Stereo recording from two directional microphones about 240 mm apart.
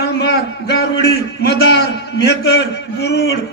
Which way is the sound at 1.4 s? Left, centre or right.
Left.